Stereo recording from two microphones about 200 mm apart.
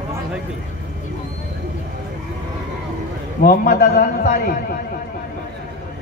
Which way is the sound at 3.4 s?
50° left (ahead or behind).